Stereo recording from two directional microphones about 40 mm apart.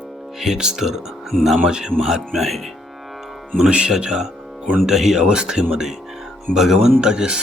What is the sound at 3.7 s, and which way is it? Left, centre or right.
Speech, right.